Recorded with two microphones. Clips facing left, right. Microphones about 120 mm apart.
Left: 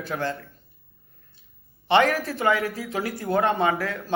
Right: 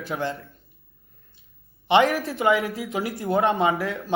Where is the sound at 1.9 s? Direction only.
20° right (ahead or behind).